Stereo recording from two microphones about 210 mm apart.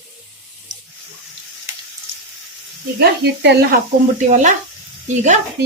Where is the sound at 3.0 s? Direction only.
50° right (ahead or behind).